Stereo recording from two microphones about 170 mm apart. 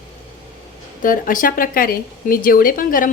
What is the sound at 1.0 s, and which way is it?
A woman's voice, 55° left (ahead or behind).